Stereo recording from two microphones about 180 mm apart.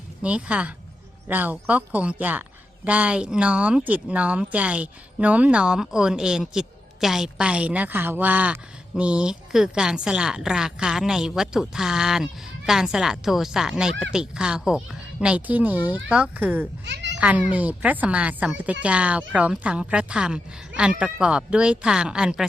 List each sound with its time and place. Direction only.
0.2 s a woman's voice: 5° right (ahead or behind)
16.8 s meow: 75° right (ahead or behind)
17.2 s a woman's voice: 10° right (ahead or behind)